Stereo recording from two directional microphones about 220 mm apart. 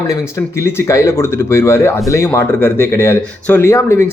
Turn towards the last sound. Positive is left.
turn(degrees=10)  # may be behind; listen again after turning